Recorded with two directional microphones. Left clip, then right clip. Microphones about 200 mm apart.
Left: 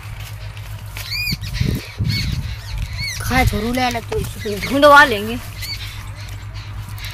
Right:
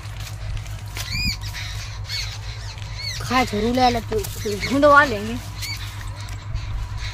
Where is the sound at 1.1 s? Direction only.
55° right (ahead or behind).